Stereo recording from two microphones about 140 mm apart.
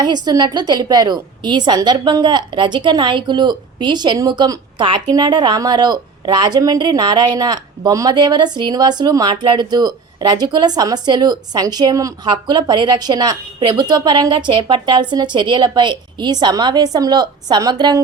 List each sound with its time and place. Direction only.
0.0 s a woman's voice: 30° right (ahead or behind)